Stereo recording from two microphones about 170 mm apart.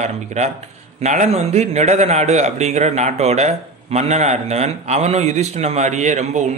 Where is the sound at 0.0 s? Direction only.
40° right (ahead or behind).